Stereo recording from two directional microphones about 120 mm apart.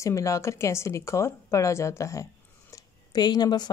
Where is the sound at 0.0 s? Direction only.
25° left (ahead or behind).